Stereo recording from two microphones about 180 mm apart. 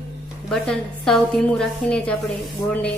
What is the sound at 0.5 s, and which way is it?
A woman's voice, centre (ahead or behind).